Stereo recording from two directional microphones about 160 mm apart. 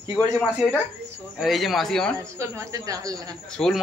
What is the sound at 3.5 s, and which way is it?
Speech, 5° left (ahead or behind).